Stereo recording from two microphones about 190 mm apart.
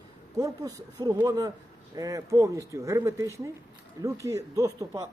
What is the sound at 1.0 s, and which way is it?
A man's voice, 20° right (ahead or behind).